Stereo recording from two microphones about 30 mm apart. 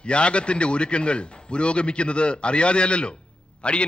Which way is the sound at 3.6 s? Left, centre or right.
Left.